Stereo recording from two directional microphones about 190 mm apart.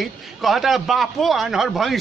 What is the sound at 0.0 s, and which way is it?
A man's voice, centre (ahead or behind).